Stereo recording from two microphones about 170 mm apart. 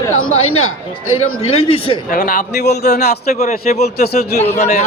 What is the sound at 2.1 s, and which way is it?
A man's voice, 50° left (ahead or behind).